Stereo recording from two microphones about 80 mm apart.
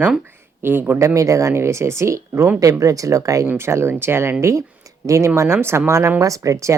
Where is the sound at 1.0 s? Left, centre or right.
Right.